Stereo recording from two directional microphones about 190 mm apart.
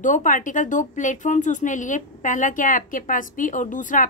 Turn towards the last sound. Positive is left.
turn(degrees=45)  # may be behind; listen again after turning